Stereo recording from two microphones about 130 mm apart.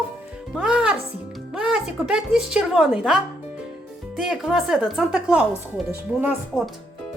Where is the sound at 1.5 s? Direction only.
5° right (ahead or behind).